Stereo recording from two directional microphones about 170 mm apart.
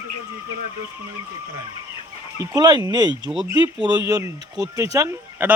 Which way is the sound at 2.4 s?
25° right (ahead or behind).